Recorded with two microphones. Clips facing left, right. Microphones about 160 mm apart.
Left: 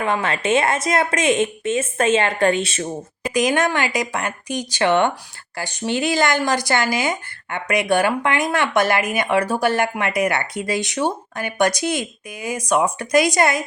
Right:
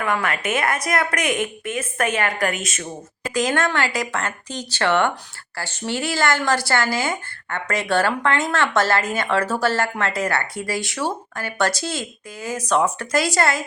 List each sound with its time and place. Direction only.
0.0 s speech: 25° left (ahead or behind)
3.2 s speech: 15° left (ahead or behind)